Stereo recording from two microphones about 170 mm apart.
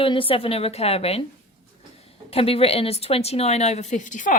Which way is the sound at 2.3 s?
35° left (ahead or behind).